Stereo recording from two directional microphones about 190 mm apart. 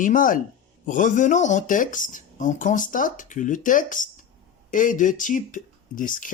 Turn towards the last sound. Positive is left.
turn(degrees=45)  # may be behind; listen again after turning